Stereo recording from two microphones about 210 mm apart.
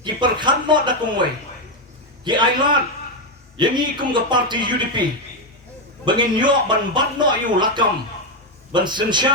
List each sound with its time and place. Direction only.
0.0 s a man's voice: 20° right (ahead or behind)
3.6 s speech: 20° right (ahead or behind)
6.1 s speech: 20° right (ahead or behind)